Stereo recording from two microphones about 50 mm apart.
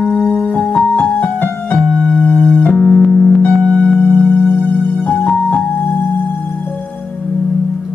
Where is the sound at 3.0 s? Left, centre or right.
Centre.